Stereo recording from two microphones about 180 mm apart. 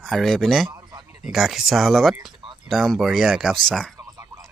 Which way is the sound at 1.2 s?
Centre (ahead or behind).